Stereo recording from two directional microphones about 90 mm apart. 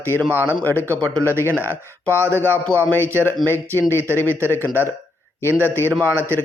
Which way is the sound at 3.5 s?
25° left (ahead or behind).